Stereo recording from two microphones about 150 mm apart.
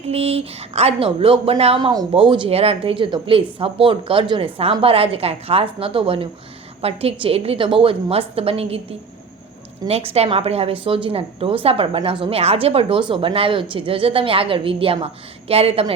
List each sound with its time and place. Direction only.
0.1 s a woman's voice: 40° right (ahead or behind)
1.9 s a woman's voice: 30° right (ahead or behind)